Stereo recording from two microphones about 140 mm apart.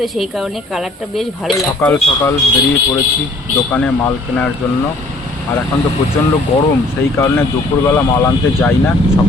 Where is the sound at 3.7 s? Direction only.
10° left (ahead or behind).